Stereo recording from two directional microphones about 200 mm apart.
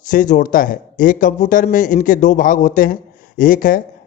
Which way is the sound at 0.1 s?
40° left (ahead or behind).